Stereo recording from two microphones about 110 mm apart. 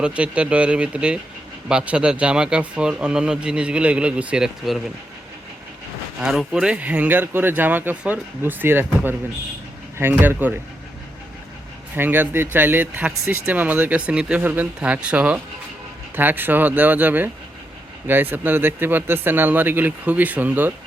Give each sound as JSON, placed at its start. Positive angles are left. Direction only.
{"t": 0.0, "sound": "speech", "side_deg": -10}
{"t": 6.1, "sound": "speech", "side_deg": -5}
{"t": 10.0, "sound": "speech", "side_deg": -20}
{"t": 11.9, "sound": "speech", "side_deg": -20}